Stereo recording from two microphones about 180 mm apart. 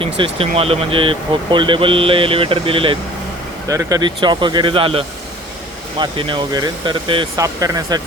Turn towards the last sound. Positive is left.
turn(degrees=-20)  # may be behind; listen again after turning